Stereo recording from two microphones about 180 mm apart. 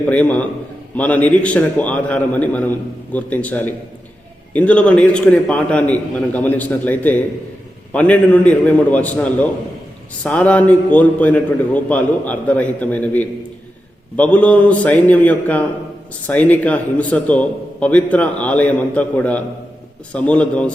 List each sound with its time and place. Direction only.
0.1 s a man's voice: 10° left (ahead or behind)